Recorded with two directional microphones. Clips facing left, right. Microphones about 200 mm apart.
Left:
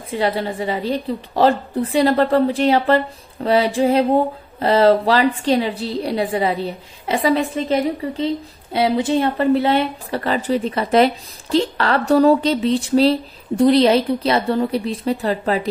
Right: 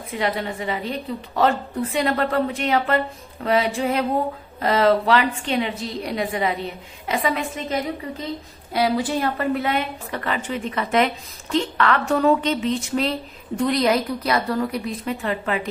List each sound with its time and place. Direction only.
0.1 s speech: 30° left (ahead or behind)